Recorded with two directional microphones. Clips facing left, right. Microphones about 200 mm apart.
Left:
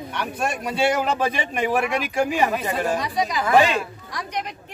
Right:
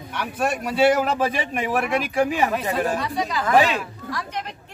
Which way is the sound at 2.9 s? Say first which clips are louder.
Left 1 dB; 15° left (ahead or behind).